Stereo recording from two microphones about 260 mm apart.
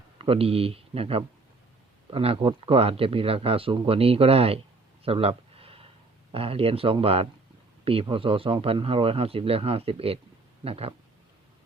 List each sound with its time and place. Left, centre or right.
0.2 s speech: right
5.0 s a sound: right
6.3 s speech: right